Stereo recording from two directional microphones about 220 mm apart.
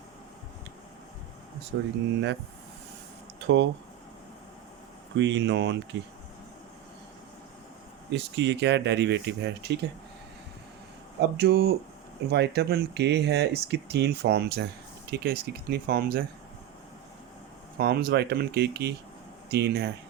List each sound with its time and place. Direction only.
1.7 s speech: 55° right (ahead or behind)
3.4 s speech: 55° right (ahead or behind)
5.1 s speech: 55° right (ahead or behind)
8.1 s speech: 50° right (ahead or behind)
11.2 s speech: 45° right (ahead or behind)
17.7 s speech: 45° right (ahead or behind)